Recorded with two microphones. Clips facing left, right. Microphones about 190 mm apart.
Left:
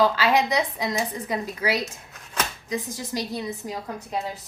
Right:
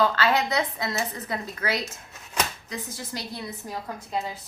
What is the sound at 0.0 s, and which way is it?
A woman's voice, 15° left (ahead or behind).